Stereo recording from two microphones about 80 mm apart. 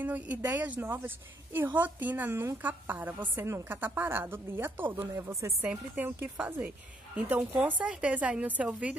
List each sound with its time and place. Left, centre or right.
0.0 s a woman's voice: right
3.3 s a woman's voice: right
5.2 s speech: right
5.7 s a woman's voice: right